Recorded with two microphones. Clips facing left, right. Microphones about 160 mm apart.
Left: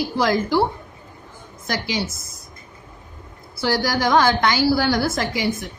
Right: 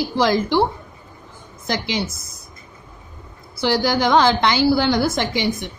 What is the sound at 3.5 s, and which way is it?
A woman's voice, 20° right (ahead or behind).